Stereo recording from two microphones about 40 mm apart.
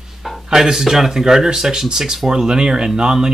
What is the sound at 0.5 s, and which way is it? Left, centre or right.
Speech, centre.